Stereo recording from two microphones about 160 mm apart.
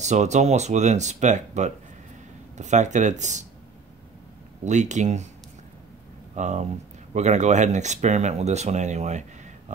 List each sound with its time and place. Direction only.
0.0 s speech: 45° right (ahead or behind)
4.6 s speech: 50° right (ahead or behind)
6.3 s speech: 50° right (ahead or behind)